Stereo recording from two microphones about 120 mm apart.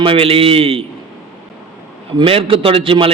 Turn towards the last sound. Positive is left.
turn(degrees=-50)  # may be behind; listen again after turning